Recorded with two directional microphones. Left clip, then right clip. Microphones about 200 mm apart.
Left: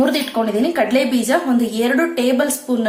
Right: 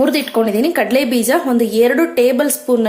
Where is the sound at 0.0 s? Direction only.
35° right (ahead or behind).